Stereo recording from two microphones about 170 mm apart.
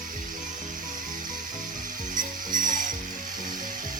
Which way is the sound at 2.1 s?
50° right (ahead or behind).